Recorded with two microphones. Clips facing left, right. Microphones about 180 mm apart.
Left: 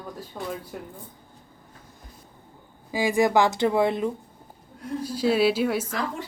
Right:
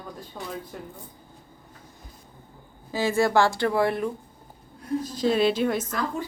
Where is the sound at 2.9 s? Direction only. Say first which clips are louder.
Left 1 dB; 15° left (ahead or behind).